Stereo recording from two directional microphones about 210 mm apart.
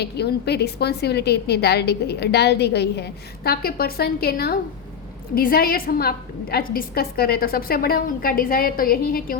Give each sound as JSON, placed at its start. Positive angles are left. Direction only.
{"t": 0.0, "sound": "a woman's voice", "side_deg": 50}